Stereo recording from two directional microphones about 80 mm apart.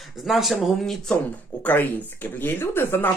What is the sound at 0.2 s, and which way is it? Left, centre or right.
Speech, centre.